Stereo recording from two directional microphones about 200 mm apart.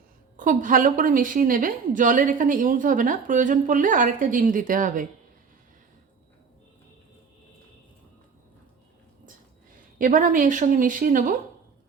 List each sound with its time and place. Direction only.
0.3 s a woman's voice: 40° right (ahead or behind)
10.0 s a woman's voice: 40° right (ahead or behind)